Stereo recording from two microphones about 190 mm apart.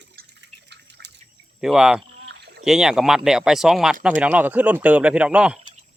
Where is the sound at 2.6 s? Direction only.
5° right (ahead or behind).